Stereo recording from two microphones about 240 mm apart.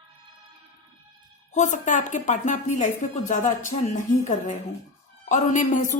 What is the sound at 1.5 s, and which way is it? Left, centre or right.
A woman's voice, left.